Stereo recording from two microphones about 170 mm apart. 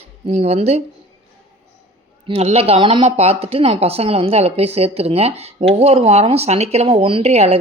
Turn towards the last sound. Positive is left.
turn(degrees=-40)  # may be behind; listen again after turning